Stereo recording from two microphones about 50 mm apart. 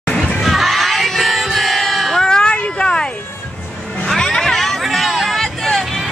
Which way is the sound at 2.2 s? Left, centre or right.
Centre.